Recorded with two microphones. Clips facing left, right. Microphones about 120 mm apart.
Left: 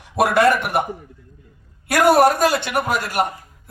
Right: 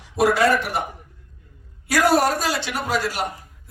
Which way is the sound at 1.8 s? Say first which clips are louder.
Left 4 dB; 55° left (ahead or behind).